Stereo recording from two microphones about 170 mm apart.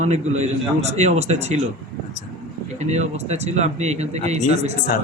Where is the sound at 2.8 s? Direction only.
40° right (ahead or behind).